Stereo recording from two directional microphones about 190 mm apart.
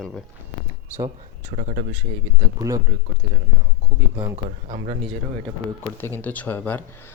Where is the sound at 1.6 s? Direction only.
40° right (ahead or behind).